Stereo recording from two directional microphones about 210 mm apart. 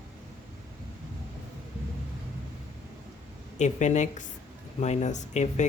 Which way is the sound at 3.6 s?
35° left (ahead or behind).